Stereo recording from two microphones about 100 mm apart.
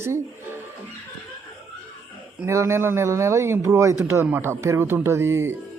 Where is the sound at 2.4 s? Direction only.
30° right (ahead or behind).